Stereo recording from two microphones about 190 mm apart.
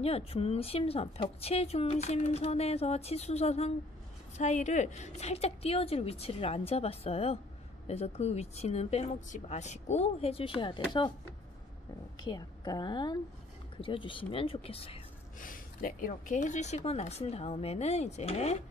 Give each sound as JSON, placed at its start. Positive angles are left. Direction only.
{"t": 0.0, "sound": "a woman's voice", "side_deg": 30}
{"t": 12.2, "sound": "speech", "side_deg": 20}
{"t": 15.3, "sound": "a woman's voice", "side_deg": 45}